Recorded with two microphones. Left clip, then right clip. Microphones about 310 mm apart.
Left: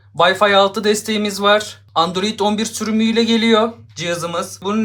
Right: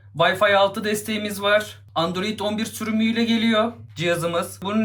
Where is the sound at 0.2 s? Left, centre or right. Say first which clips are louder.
Left 5 dB; centre.